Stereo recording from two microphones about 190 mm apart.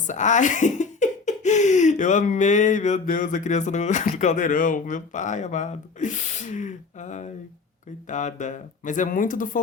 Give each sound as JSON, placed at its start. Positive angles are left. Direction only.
{"t": 0.1, "sound": "speech", "side_deg": 40}